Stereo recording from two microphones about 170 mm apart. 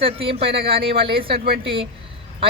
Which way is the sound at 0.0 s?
35° right (ahead or behind).